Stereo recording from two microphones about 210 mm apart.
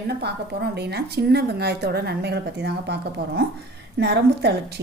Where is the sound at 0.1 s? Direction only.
50° right (ahead or behind).